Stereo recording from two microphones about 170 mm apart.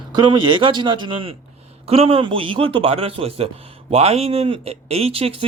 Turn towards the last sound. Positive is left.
turn(degrees=-35)  # may be behind; listen again after turning